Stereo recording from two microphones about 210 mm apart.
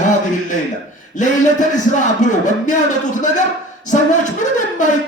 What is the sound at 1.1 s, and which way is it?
A man's voice, 35° left (ahead or behind).